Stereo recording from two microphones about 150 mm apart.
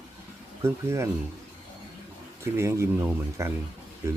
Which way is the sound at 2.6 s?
20° right (ahead or behind).